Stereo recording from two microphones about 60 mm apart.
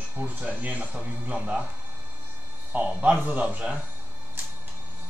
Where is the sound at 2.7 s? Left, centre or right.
Right.